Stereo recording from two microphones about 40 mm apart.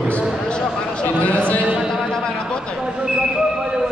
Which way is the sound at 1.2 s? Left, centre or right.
Left.